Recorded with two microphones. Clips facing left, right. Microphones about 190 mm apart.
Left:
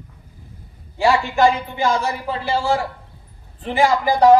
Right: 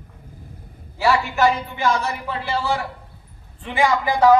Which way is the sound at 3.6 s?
35° left (ahead or behind).